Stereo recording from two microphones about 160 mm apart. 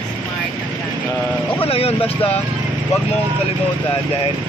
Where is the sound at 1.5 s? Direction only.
40° left (ahead or behind).